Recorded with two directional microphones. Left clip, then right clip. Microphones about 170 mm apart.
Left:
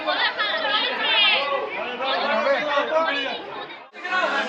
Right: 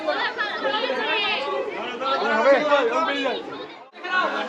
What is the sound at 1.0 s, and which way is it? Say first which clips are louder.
Children playing: left 4 dB; 20° right (ahead or behind).